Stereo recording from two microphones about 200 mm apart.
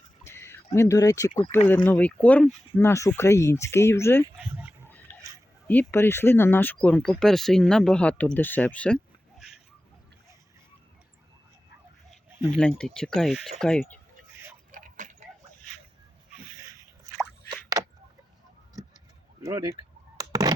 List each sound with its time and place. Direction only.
0.3 s a sound: 10° left (ahead or behind)
1.4 s speech: 10° left (ahead or behind)
4.4 s dog: 10° right (ahead or behind)
5.6 s speech: 10° left (ahead or behind)
12.5 s speech: 5° left (ahead or behind)
14.7 s tick-tock: 40° right (ahead or behind)
16.6 s biting: 15° right (ahead or behind)
17.5 s a sound: 15° right (ahead or behind)
19.5 s a sound: 15° right (ahead or behind)